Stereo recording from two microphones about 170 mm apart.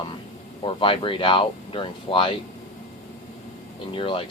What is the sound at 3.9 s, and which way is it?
Speech, 30° left (ahead or behind).